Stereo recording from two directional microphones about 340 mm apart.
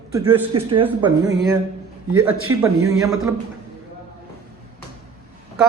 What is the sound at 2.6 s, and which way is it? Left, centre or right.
Speech, centre.